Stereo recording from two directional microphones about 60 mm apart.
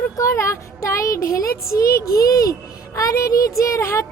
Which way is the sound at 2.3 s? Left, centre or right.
Left.